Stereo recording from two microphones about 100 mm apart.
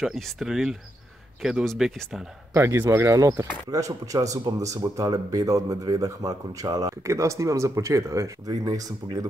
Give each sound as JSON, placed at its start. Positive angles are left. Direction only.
{"t": 0.0, "sound": "speech", "side_deg": 0}
{"t": 2.5, "sound": "speech", "side_deg": -25}